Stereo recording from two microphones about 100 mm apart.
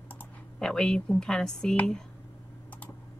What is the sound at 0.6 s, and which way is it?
Speech, 5° left (ahead or behind).